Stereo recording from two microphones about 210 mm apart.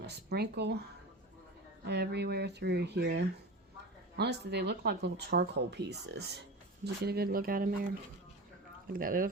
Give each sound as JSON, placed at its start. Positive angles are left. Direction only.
{"t": 0.0, "sound": "speech", "side_deg": -50}
{"t": 1.9, "sound": "speech", "side_deg": -50}
{"t": 8.9, "sound": "speech", "side_deg": -40}